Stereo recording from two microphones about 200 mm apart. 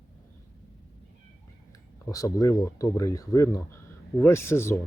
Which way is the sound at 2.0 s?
15° left (ahead or behind).